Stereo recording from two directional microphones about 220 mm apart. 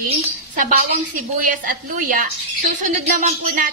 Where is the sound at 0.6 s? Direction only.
35° right (ahead or behind).